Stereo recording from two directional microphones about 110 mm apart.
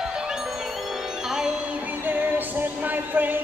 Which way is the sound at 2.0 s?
15° right (ahead or behind).